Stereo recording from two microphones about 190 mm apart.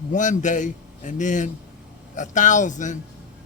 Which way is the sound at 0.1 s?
40° left (ahead or behind).